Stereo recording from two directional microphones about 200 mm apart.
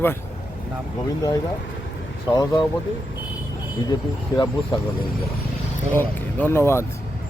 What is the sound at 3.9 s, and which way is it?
Speech, 20° left (ahead or behind).